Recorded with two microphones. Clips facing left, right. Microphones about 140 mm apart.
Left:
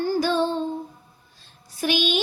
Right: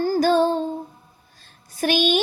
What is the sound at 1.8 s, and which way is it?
Child singing, 50° right (ahead or behind).